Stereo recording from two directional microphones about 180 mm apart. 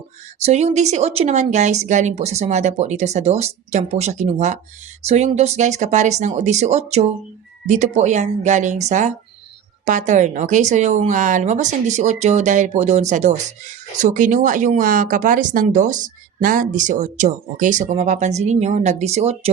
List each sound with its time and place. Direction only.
0.3 s speech: 35° right (ahead or behind)